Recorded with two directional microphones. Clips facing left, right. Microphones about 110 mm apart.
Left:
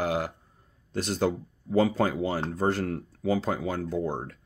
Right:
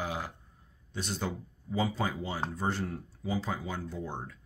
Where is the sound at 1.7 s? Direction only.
60° left (ahead or behind).